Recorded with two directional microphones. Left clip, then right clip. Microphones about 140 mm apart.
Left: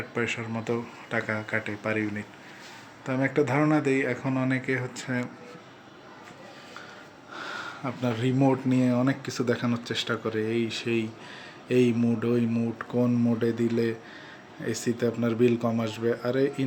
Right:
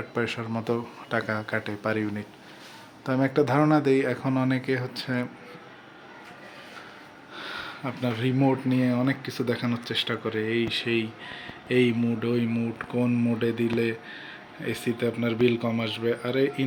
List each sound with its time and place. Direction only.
0.5 s speech: 20° right (ahead or behind)
7.3 s speech: centre (ahead or behind)